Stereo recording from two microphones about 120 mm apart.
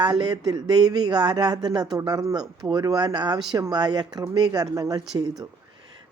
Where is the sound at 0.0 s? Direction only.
35° right (ahead or behind).